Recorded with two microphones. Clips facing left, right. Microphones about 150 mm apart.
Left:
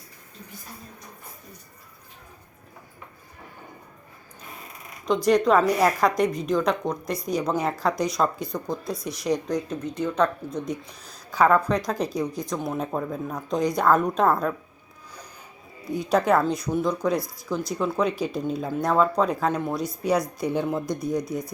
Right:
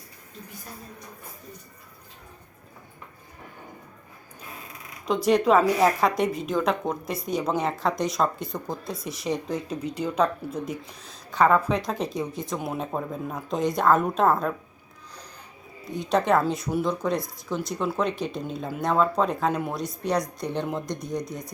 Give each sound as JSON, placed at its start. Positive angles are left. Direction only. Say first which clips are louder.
{"t": 5.0, "sound": "a woman's voice", "louder": "left 1 dB", "side_deg": -5}
{"t": 15.8, "sound": "a woman's voice", "louder": "left 2 dB", "side_deg": 0}